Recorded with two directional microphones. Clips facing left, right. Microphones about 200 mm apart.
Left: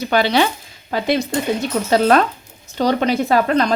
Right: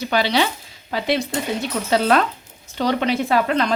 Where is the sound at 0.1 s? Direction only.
50° left (ahead or behind).